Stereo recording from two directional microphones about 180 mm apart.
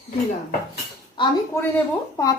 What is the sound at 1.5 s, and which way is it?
Speech, 15° left (ahead or behind).